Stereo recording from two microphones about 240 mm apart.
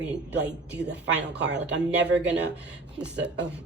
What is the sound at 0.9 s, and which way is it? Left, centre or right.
Speech, right.